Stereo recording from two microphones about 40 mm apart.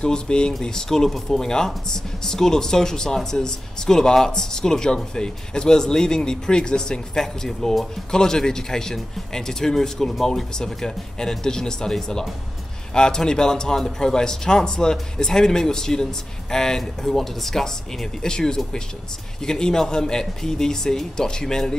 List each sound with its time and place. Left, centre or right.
0.0 s speech: left
7.2 s speech: centre